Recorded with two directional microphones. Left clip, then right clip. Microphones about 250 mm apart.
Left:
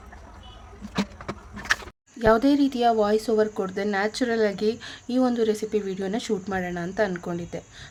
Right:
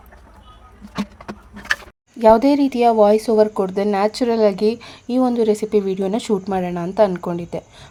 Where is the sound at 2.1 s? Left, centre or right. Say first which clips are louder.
Right 7 dB; centre.